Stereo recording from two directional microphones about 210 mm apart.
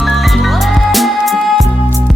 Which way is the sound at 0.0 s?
Centre (ahead or behind).